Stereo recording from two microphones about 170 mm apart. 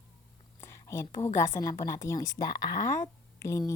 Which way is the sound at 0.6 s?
15° left (ahead or behind).